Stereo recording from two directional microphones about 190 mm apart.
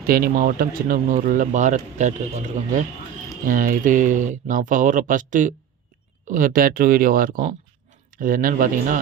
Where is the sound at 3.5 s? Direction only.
45° right (ahead or behind).